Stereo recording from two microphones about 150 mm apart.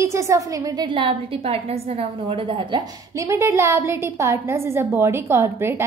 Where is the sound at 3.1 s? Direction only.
20° right (ahead or behind).